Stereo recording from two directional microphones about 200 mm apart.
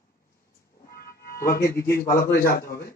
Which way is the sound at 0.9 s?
50° left (ahead or behind).